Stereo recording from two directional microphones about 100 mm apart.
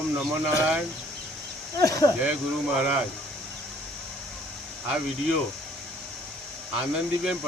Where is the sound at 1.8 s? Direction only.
35° left (ahead or behind).